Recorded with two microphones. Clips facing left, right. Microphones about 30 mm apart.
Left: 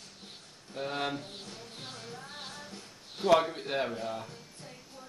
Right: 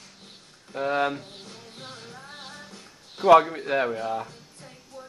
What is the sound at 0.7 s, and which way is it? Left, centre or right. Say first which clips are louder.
Speech: right 9 dB; right.